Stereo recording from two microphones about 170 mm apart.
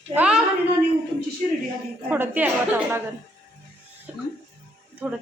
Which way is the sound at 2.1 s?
10° right (ahead or behind).